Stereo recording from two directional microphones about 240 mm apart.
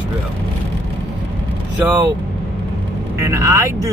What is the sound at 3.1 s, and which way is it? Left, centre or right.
Speech, centre.